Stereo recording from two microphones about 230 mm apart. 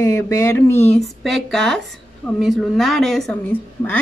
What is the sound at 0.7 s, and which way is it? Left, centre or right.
Speech, left.